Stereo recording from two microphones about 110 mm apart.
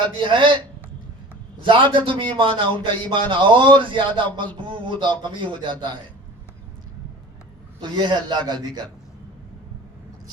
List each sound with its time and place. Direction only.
0.2 s a man's voice: 50° right (ahead or behind)
1.6 s a man's voice: 50° right (ahead or behind)
7.8 s a man's voice: 45° right (ahead or behind)